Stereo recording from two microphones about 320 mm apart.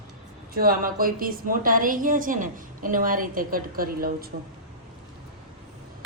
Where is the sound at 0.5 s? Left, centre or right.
Right.